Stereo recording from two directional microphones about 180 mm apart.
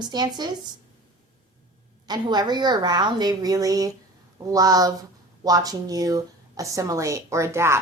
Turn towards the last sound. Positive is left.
turn(degrees=-15)  # may be behind; listen again after turning